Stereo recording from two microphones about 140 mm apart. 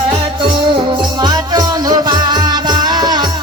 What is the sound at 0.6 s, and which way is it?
Music, 35° right (ahead or behind).